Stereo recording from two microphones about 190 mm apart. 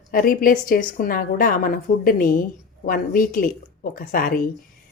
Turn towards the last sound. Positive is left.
turn(degrees=50)  # may be behind; listen again after turning